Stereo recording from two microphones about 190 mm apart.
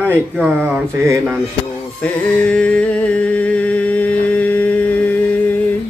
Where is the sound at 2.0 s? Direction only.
5° left (ahead or behind).